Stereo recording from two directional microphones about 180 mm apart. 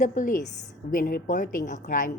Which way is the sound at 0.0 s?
45° left (ahead or behind).